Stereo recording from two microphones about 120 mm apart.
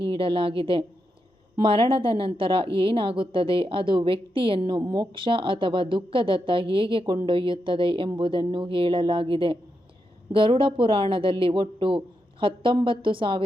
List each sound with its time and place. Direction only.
0.0 s a woman's voice: 45° right (ahead or behind)